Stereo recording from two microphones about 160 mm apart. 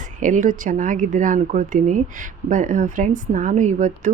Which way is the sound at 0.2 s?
55° right (ahead or behind).